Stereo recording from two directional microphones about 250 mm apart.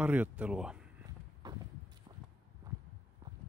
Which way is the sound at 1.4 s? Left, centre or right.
Centre.